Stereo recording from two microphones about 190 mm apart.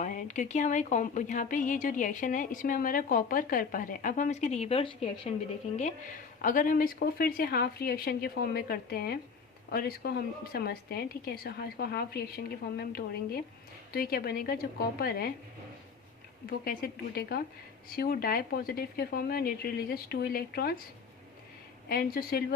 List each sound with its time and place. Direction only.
0.0 s a woman's voice: 40° left (ahead or behind)
6.4 s speech: 45° left (ahead or behind)
16.5 s speech: 50° left (ahead or behind)
21.8 s speech: 50° left (ahead or behind)